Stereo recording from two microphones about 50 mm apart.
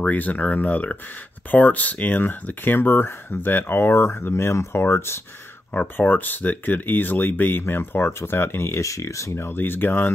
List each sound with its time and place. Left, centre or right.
0.0 s speech: left
5.7 s speech: left